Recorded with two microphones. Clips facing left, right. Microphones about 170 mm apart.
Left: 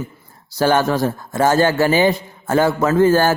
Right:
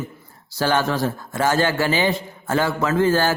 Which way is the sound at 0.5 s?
45° left (ahead or behind).